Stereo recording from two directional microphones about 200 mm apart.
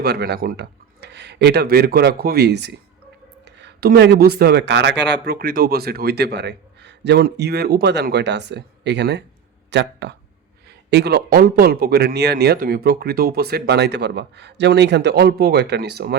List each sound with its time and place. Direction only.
0.0 s speech: 55° right (ahead or behind)